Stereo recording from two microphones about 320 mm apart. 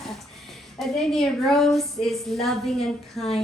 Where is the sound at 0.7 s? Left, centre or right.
Centre.